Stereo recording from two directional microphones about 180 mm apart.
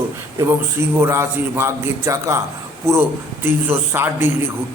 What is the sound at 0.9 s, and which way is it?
A man's voice, 15° right (ahead or behind).